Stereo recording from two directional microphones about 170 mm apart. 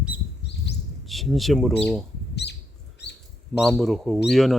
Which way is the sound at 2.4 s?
85° left.